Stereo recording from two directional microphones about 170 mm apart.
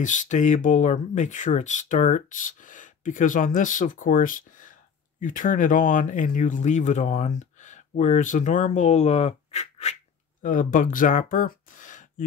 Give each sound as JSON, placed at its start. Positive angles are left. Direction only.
{"t": 0.0, "sound": "speech", "side_deg": 45}
{"t": 10.4, "sound": "speech", "side_deg": 50}